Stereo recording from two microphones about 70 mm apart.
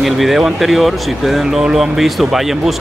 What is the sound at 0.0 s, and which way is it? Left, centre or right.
Speech, centre.